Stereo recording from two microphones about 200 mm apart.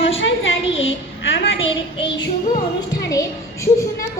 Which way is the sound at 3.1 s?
15° left (ahead or behind).